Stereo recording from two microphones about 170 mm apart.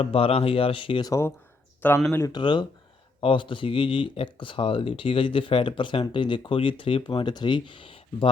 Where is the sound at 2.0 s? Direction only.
20° left (ahead or behind).